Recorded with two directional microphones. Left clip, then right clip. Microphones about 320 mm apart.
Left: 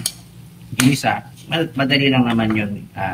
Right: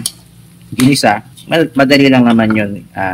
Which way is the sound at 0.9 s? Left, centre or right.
Centre.